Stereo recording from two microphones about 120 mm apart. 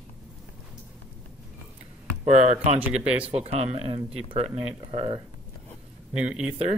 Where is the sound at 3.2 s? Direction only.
55° right (ahead or behind).